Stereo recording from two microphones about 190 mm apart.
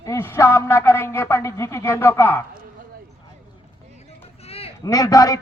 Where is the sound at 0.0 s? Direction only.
15° left (ahead or behind).